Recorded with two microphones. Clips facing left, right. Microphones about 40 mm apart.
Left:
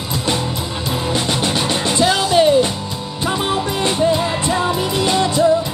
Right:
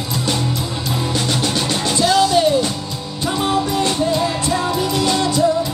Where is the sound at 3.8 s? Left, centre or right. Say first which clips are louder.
Left 1 dB; left.